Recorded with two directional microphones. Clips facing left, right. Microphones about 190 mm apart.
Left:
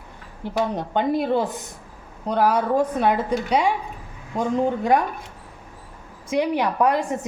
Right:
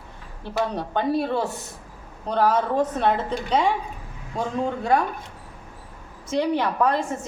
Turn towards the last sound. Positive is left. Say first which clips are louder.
# left 2 dB
turn(degrees=15)  # may be behind; listen again after turning